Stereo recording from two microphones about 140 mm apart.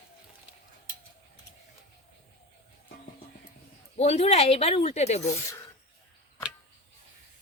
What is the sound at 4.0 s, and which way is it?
Speech, 50° left (ahead or behind).